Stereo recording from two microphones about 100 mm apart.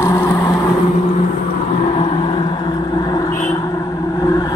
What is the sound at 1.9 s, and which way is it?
Vehicle, 65° left (ahead or behind).